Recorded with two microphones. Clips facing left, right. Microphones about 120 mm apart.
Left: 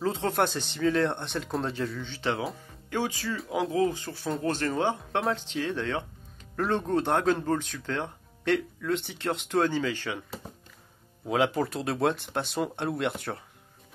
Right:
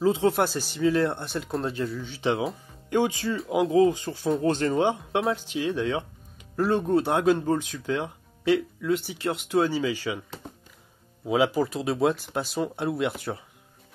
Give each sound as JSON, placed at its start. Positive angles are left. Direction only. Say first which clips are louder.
{"t": 0.0, "sound": "speech", "louder": "right 4 dB", "side_deg": -5}
{"t": 11.2, "sound": "speech", "louder": "right 3 dB", "side_deg": -5}